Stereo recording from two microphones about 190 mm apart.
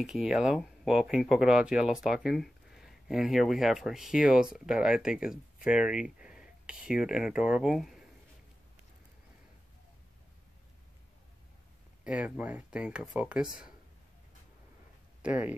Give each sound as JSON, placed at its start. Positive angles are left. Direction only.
{"t": 0.0, "sound": "speech", "side_deg": -5}
{"t": 12.0, "sound": "speech", "side_deg": -5}
{"t": 15.2, "sound": "speech", "side_deg": -10}